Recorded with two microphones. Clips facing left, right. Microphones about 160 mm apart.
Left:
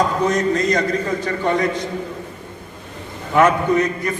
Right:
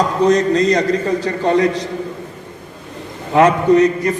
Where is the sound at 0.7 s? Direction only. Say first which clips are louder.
Right 4 dB; 35° right (ahead or behind).